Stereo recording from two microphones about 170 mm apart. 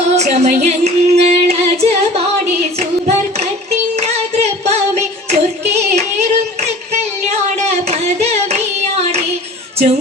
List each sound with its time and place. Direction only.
0.1 s female singing: 40° right (ahead or behind)
0.6 s singing: 40° right (ahead or behind)
3.9 s singing: 40° right (ahead or behind)
5.3 s hands: 40° right (ahead or behind)
7.3 s a sound: 40° right (ahead or behind)